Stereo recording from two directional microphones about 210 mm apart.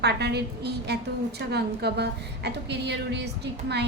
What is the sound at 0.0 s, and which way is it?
A woman's voice, 50° right (ahead or behind).